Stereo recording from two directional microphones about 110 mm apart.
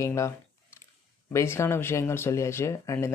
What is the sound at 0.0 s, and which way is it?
Speech, 30° left (ahead or behind).